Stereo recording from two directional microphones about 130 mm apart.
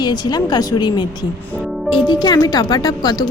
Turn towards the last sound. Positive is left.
turn(degrees=30)  # may be behind; listen again after turning